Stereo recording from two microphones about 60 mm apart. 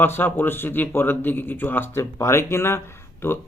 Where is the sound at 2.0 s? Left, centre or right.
Left.